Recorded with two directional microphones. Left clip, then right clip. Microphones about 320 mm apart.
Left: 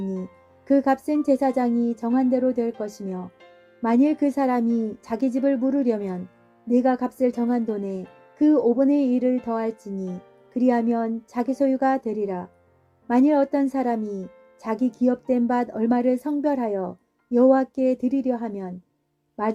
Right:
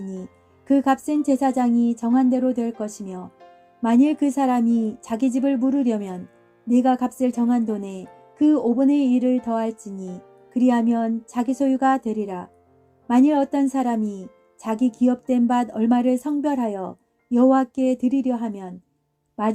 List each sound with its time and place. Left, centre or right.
0.7 s speech: right